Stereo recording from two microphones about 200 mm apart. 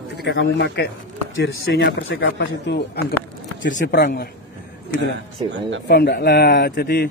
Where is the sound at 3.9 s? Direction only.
50° left (ahead or behind).